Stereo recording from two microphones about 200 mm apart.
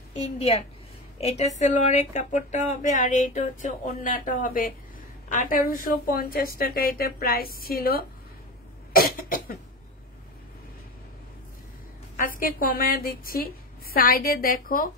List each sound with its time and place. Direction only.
0.2 s a woman's voice: 30° left (ahead or behind); by 8.0 s 50° left (ahead or behind)
8.9 s cough: 45° left (ahead or behind)
12.2 s a woman's voice: 45° left (ahead or behind)